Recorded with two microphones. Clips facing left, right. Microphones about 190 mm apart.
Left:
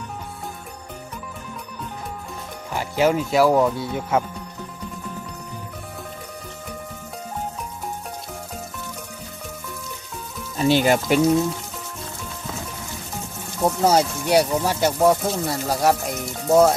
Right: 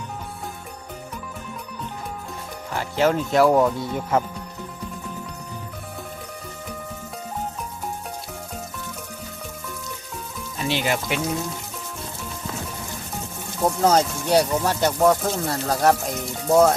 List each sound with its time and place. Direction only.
2.7 s speech: 10° left (ahead or behind)
10.6 s speech: 40° left (ahead or behind)
13.6 s speech: 5° left (ahead or behind)